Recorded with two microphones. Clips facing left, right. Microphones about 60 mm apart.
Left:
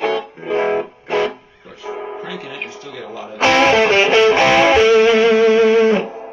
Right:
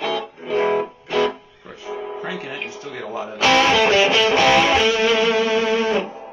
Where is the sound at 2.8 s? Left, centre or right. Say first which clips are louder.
Right 2 dB; right.